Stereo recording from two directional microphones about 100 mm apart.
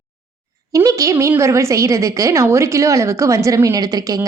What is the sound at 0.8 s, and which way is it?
A woman's voice, 35° right (ahead or behind).